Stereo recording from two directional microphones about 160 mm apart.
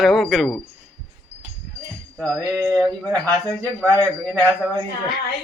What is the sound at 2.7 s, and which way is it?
Speech, 5° left (ahead or behind).